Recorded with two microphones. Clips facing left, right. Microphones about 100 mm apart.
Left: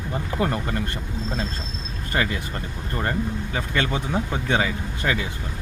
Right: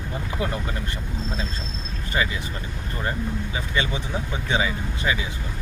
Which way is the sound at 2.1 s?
50° left (ahead or behind).